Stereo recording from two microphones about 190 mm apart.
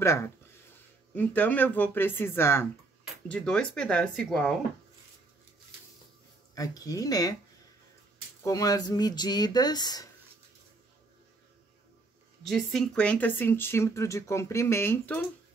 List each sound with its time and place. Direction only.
1.1 s speech: 10° left (ahead or behind)
6.5 s speech: 20° left (ahead or behind)
8.4 s speech: 15° left (ahead or behind)
12.4 s speech: centre (ahead or behind)